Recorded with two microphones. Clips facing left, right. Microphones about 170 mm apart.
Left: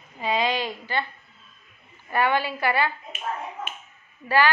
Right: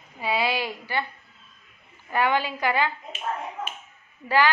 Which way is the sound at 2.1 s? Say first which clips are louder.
Even; 15° right (ahead or behind).